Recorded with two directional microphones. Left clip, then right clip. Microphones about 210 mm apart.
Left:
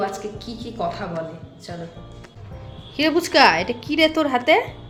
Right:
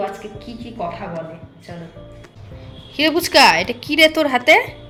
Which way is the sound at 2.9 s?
Centre (ahead or behind).